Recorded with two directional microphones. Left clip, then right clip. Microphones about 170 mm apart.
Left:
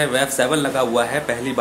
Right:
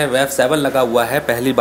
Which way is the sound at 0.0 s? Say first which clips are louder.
Right 3 dB; 20° right (ahead or behind).